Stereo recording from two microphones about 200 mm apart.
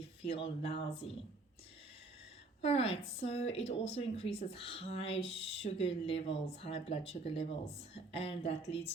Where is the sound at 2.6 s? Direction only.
30° left (ahead or behind).